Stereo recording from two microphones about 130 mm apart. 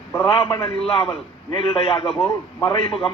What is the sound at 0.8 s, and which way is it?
A man's voice, 45° left (ahead or behind).